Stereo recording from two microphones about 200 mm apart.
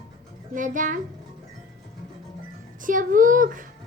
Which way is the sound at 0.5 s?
40° right (ahead or behind).